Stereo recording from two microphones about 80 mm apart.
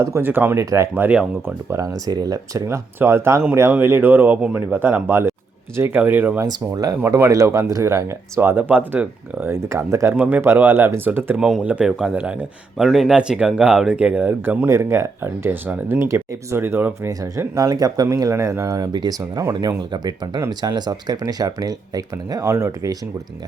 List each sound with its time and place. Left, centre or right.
0.2 s speech: right
0.5 s speech: right
2.6 s speech: right
6.0 s speech: right
7.3 s speech: right
9.6 s speech: right
11.3 s speech: centre
12.7 s speech: centre; by 14.7 s right
14.7 s speech: right
17.5 s speech: right
19.5 s speech: right